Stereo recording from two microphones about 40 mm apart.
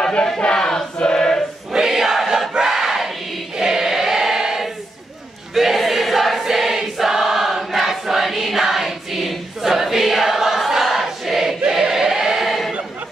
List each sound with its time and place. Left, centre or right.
0.6 s choir: centre
1.7 s choir: centre
2.5 s battle cry: centre
3.5 s choir: centre
12.4 s a sound: centre